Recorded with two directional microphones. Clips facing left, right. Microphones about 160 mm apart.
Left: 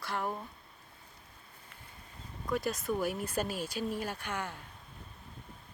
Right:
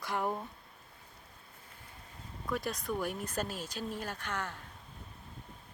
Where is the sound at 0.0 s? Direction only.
15° right (ahead or behind).